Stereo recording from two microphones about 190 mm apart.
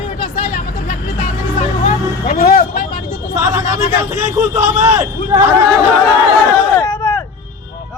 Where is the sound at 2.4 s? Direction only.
55° left (ahead or behind).